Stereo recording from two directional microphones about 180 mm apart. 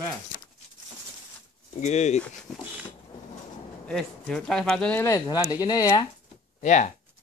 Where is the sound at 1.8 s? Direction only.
40° left (ahead or behind).